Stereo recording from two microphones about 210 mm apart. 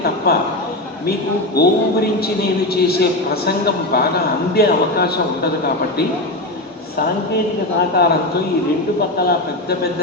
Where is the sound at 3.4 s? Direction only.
50° left (ahead or behind).